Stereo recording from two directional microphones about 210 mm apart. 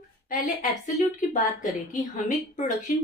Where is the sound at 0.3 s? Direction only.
35° left (ahead or behind).